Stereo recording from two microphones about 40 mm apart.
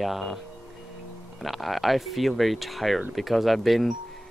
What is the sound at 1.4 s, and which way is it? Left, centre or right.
Speech, centre.